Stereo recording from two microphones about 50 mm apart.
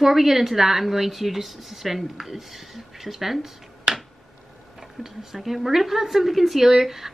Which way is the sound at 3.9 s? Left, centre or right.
Centre.